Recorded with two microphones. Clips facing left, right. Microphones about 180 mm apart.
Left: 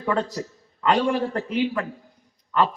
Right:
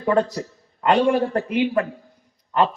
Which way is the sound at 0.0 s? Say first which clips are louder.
Right 5 dB; 40° right (ahead or behind).